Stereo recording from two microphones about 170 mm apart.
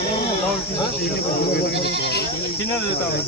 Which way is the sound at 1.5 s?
70° left (ahead or behind).